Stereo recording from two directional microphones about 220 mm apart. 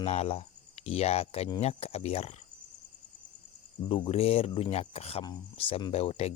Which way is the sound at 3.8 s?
25° left (ahead or behind).